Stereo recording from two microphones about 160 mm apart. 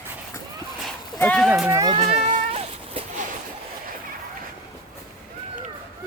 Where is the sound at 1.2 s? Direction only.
5° left (ahead or behind).